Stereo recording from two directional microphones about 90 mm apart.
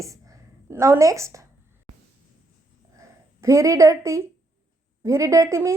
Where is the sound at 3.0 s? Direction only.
35° right (ahead or behind).